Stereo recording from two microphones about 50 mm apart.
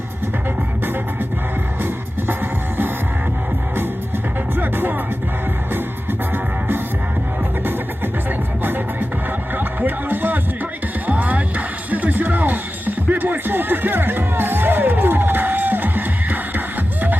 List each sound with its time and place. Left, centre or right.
1.8 s music: right
4.5 s music: right